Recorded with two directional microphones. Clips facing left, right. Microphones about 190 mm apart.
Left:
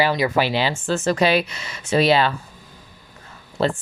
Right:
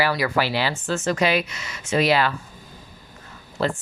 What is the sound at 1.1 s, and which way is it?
Speech, 30° left (ahead or behind).